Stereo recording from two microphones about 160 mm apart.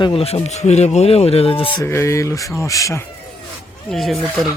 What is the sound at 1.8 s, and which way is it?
Speech, 15° left (ahead or behind).